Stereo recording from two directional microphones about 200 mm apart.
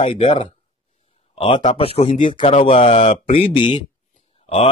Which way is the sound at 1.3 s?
25° left (ahead or behind).